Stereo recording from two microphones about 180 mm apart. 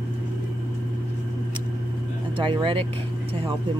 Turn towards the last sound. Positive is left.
turn(degrees=-30)  # may be behind; listen again after turning